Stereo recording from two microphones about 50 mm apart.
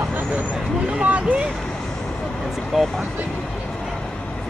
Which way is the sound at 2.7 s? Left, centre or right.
Centre.